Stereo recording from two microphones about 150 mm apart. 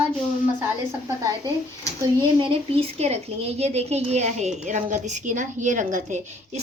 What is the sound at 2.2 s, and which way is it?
A woman's voice, 35° right (ahead or behind).